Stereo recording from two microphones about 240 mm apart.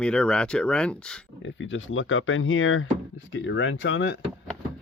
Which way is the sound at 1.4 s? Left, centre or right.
Left.